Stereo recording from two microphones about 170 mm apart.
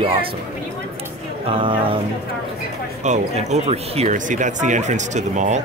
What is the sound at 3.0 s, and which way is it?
Speech, 45° right (ahead or behind).